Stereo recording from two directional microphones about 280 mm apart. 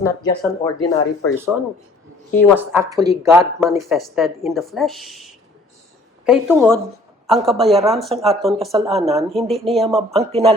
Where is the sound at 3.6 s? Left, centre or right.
Centre.